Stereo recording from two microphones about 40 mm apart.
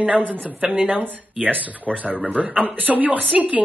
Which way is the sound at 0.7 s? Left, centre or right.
Right.